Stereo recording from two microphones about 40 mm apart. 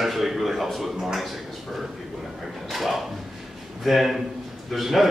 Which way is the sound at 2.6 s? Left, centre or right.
Centre.